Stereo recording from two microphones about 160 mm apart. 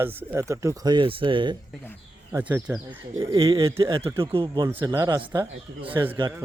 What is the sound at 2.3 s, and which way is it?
Speech, 20° right (ahead or behind).